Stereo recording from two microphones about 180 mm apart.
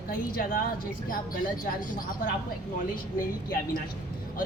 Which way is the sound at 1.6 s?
50° left (ahead or behind).